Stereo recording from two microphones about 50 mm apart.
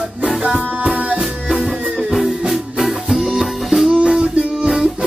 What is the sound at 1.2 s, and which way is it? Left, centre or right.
Music, centre.